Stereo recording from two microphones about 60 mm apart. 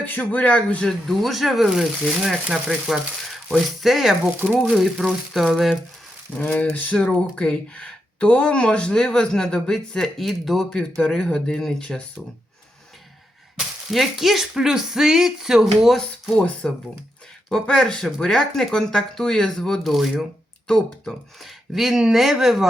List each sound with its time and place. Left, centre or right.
0.0 s speech: left
0.9 s speech: centre
6.4 s speech: left
13.6 s speech: centre
16.3 s speech: centre
19.8 s speech: centre
20.7 s speech: centre
21.4 s speech: centre